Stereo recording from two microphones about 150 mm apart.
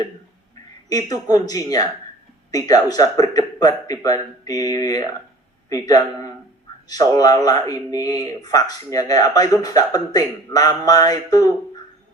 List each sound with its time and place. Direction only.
0.9 s a man's voice: 25° left (ahead or behind)